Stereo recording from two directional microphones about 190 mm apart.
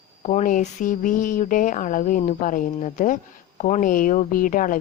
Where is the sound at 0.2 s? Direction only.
40° left (ahead or behind).